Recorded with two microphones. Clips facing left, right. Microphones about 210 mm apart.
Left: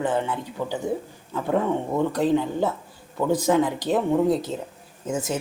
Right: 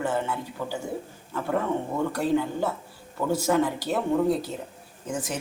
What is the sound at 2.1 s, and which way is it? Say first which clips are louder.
A woman's voice: left 1 dB; 20° left (ahead or behind).